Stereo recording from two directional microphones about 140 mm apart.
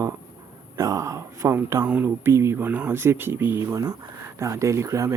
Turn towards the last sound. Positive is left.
turn(degrees=-20)  # may be behind; listen again after turning